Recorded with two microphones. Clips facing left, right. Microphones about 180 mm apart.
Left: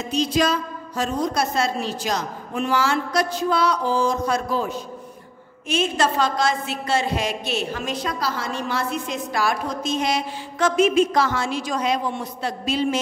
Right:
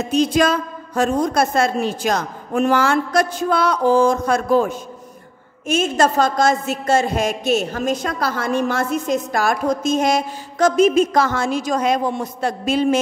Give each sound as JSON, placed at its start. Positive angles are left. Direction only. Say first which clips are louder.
{"t": 0.0, "sound": "a man's voice", "louder": "right 5 dB", "side_deg": -50}